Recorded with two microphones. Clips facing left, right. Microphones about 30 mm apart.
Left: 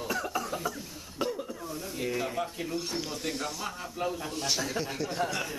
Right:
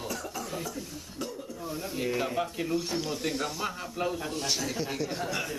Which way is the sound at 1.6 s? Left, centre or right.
Centre.